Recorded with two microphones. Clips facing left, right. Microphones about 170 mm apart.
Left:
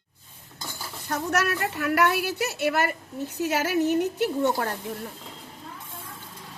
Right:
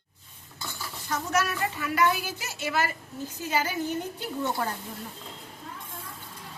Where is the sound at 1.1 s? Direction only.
60° left (ahead or behind).